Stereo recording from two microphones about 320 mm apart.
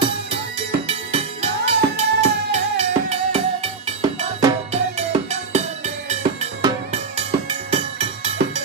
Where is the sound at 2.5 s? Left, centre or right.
Centre.